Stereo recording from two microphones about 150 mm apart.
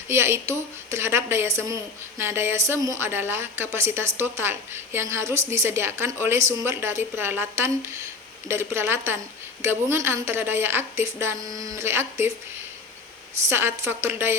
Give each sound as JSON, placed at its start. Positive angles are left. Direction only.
{"t": 0.1, "sound": "a woman's voice", "side_deg": -15}
{"t": 13.5, "sound": "a woman's voice", "side_deg": -15}